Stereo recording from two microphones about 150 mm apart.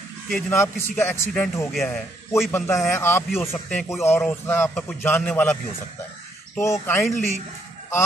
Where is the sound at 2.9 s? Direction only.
15° left (ahead or behind).